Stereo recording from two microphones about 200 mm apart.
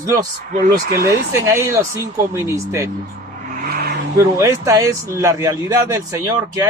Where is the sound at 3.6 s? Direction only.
50° right (ahead or behind).